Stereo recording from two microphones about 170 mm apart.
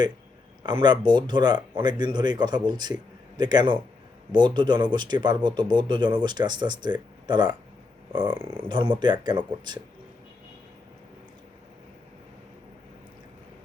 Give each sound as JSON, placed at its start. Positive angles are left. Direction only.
{"t": 0.6, "sound": "speech", "side_deg": -25}